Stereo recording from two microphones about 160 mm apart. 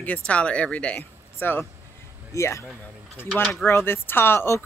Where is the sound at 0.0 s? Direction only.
10° left (ahead or behind).